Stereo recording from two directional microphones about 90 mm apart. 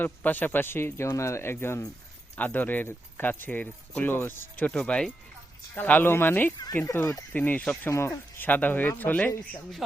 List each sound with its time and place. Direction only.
0.0 s speech: 20° left (ahead or behind)
4.7 s speech: 10° left (ahead or behind)
5.7 s speech: 20° left (ahead or behind)
7.9 s speech: 30° left (ahead or behind)